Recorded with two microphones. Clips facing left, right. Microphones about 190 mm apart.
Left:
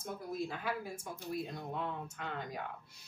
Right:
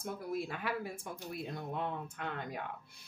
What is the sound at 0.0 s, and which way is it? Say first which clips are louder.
A woman's voice: right 1 dB; 65° right (ahead or behind).